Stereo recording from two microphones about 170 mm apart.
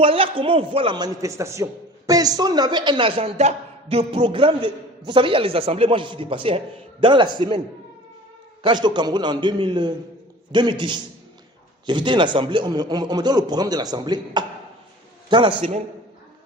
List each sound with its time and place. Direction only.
0.0 s a man's voice: 35° right (ahead or behind)
8.6 s a man's voice: 25° right (ahead or behind)